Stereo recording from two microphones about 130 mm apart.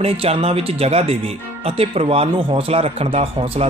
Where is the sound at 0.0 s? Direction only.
50° right (ahead or behind).